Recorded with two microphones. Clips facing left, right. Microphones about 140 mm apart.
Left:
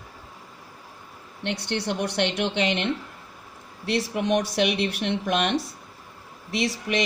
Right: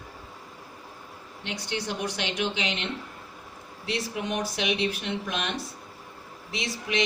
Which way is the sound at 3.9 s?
70° left (ahead or behind).